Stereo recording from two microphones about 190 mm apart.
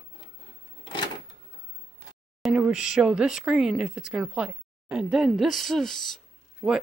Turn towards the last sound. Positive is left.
turn(degrees=0)  # may be behind; listen again after turning